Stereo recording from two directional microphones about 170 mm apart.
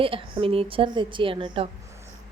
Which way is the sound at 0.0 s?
30° right (ahead or behind).